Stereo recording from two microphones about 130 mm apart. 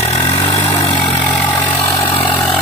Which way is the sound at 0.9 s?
10° left (ahead or behind).